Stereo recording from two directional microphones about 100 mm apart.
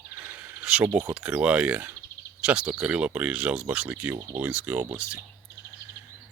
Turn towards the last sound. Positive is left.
turn(degrees=-15)  # may be behind; listen again after turning